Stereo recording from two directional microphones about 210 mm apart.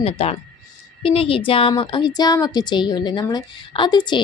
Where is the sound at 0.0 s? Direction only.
30° left (ahead or behind).